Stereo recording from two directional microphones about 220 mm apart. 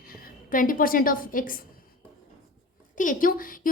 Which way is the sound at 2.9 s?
35° left (ahead or behind).